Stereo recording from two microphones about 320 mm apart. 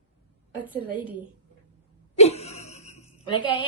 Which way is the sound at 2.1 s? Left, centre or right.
Centre.